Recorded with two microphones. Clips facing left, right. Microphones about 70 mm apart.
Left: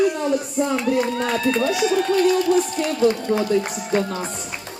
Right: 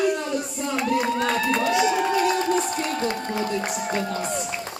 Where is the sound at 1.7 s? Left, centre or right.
Centre.